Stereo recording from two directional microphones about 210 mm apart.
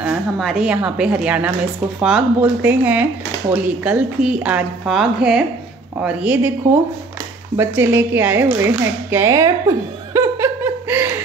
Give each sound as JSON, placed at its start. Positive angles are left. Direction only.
{"t": 0.0, "sound": "a woman's voice", "side_deg": 0}
{"t": 7.5, "sound": "a woman's voice", "side_deg": -10}